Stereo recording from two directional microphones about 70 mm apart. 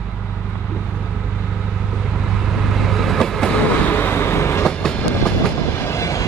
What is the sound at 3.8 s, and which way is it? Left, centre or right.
Vehicle, left.